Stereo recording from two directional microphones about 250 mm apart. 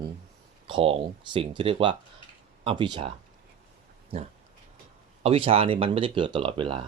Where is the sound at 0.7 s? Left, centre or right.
Right.